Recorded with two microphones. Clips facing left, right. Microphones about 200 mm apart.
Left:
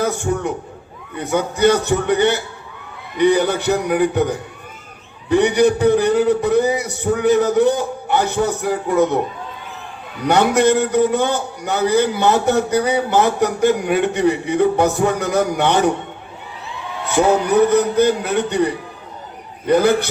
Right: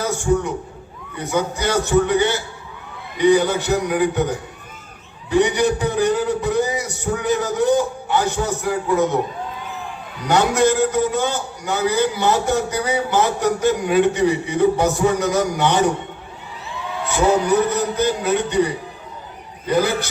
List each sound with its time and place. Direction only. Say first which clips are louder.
0.0 s a man's voice: even; 60° left (ahead or behind)
5.3 s a man's voice: left 3 dB; 60° left (ahead or behind)
10.2 s a man's voice: left 2 dB; 60° left (ahead or behind)
17.1 s a man's voice: left 2 dB; 60° left (ahead or behind)